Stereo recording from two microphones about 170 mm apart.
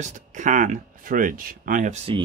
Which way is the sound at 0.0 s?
50° right (ahead or behind).